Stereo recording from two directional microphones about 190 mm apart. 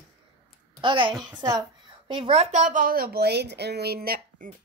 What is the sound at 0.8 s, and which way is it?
Speech, 25° right (ahead or behind).